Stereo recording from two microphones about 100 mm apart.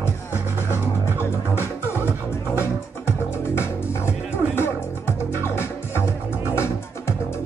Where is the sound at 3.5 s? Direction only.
25° left (ahead or behind).